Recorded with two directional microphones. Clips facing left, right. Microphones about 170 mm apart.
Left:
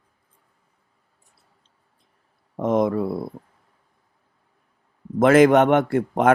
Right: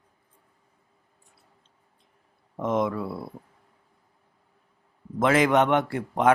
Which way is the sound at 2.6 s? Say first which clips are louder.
Left 5 dB; 40° left (ahead or behind).